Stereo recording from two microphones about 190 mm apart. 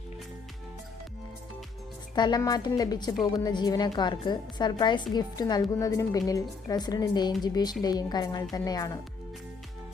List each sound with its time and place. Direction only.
2.1 s a woman's voice: 20° left (ahead or behind)